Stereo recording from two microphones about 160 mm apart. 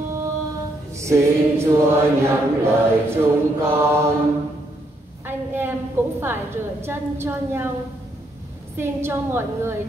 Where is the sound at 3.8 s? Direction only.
15° right (ahead or behind).